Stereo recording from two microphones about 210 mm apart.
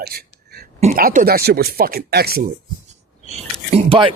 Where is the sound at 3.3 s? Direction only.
25° right (ahead or behind).